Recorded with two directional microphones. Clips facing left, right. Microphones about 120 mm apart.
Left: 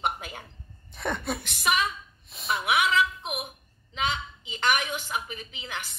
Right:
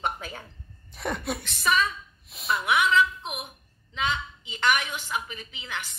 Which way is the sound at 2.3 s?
Centre (ahead or behind).